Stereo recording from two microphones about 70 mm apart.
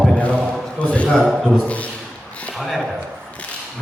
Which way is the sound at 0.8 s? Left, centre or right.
Centre.